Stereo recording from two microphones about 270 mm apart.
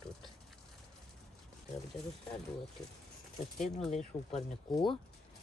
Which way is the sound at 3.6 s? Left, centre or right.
Centre.